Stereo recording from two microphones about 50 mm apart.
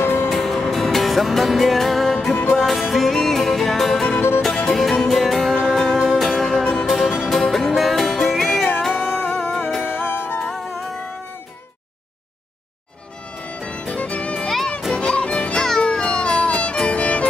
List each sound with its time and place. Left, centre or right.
0.3 s music: centre
6.6 s music: left
6.9 s music: centre
9.9 s music: left
10.4 s music: centre
13.4 s music: left
14.9 s music: centre